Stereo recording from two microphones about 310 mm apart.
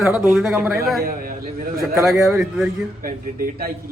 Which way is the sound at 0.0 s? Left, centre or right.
Centre.